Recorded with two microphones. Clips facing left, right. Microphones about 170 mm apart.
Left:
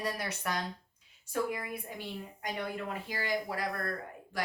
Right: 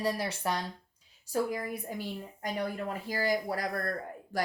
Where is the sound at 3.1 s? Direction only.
40° right (ahead or behind).